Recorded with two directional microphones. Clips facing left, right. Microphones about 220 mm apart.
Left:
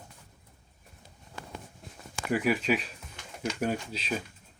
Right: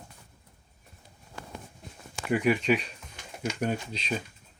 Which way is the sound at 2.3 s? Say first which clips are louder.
Right 2 dB; centre (ahead or behind).